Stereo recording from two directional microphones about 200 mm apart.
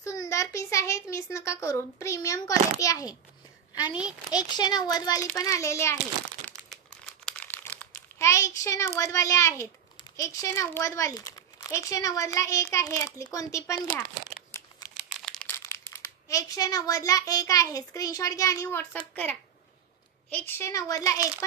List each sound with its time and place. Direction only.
0.0 s a sound: 15° left (ahead or behind)
1.1 s a child's voice: 15° left (ahead or behind)
6.4 s crumpling: 5° left (ahead or behind)
9.9 s speech: 15° left (ahead or behind)
15.0 s a child's voice: centre (ahead or behind); by 21.5 s 15° left (ahead or behind)